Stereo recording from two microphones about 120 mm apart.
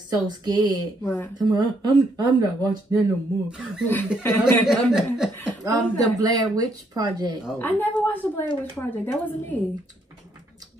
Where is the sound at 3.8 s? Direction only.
15° left (ahead or behind).